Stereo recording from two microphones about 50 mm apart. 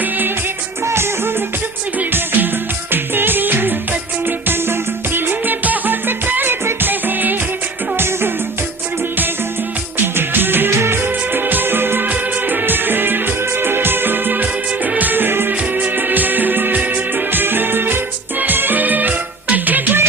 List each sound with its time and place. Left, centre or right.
0.9 s music: right
2.1 s music: right
10.2 s music: right
15.7 s music: right